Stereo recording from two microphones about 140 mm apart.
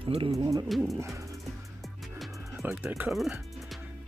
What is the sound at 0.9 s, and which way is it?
Music, 20° right (ahead or behind).